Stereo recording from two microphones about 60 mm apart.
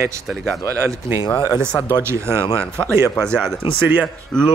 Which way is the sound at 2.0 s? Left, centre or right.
Right.